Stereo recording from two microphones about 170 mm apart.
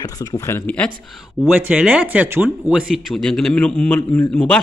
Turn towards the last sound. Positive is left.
turn(degrees=5)  # may be behind; listen again after turning